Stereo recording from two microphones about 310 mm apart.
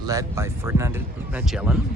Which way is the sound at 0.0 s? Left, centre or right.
Centre.